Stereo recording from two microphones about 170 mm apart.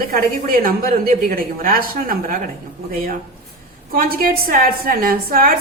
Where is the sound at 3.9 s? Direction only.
60° right (ahead or behind).